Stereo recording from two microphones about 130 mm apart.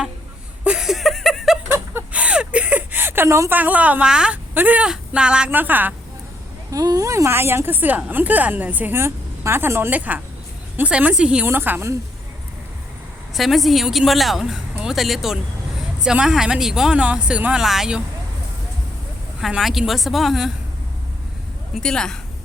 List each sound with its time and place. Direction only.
0.6 s a sound: 5° right (ahead or behind)
1.7 s a sound: 15° right (ahead or behind)
3.6 s speech: 10° right (ahead or behind)
6.7 s speech: 25° right (ahead or behind)
13.3 s a woman's voice: centre (ahead or behind)
19.4 s a woman's voice: centre (ahead or behind)
21.8 s a woman's voice: 5° left (ahead or behind)